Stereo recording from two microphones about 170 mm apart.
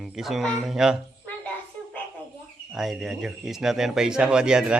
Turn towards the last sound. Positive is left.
turn(degrees=-5)  # may be behind; listen again after turning